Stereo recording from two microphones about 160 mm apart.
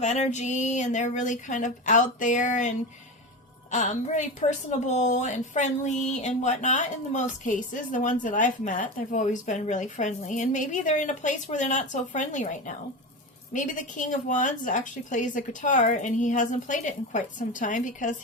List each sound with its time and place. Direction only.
0.0 s a woman's voice: 45° left (ahead or behind)